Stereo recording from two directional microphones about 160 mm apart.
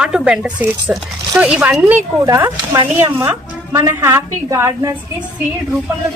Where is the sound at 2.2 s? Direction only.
20° right (ahead or behind).